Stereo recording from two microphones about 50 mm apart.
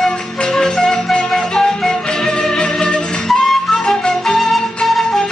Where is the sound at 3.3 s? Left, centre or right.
Centre.